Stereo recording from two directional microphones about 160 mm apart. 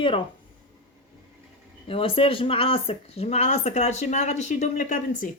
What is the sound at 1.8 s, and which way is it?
Speech, 35° left (ahead or behind).